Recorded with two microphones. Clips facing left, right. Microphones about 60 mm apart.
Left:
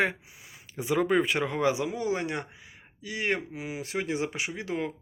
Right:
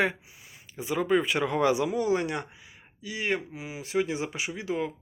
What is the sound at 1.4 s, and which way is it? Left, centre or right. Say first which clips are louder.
Speech: right 2 dB; centre.